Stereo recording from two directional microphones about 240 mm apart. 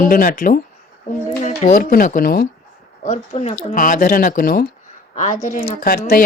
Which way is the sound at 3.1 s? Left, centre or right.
Left.